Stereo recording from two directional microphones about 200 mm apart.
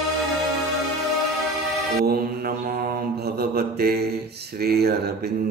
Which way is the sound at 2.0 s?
50° right (ahead or behind).